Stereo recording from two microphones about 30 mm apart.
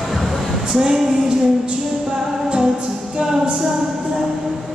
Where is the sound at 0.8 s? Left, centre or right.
Centre.